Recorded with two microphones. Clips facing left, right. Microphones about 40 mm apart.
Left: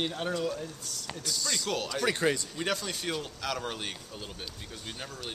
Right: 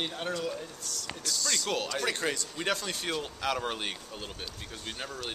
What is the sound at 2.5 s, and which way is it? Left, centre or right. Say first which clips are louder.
Speech: even; centre.